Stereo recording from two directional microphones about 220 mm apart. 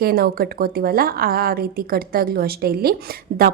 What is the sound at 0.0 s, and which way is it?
A woman's voice, 40° right (ahead or behind).